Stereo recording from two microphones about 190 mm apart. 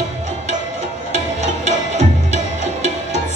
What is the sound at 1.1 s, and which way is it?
Music, 35° right (ahead or behind).